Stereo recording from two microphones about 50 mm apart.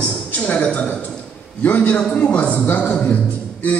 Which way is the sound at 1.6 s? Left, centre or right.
Left.